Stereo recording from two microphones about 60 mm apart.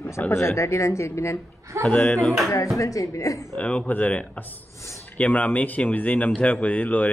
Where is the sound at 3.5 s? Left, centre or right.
Left.